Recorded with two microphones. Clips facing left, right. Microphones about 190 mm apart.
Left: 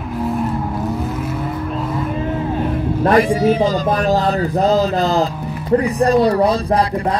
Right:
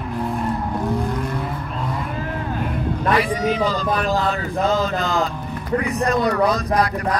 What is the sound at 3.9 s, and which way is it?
Music, 40° left (ahead or behind).